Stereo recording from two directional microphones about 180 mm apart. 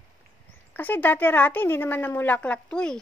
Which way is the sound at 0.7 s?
10° left (ahead or behind).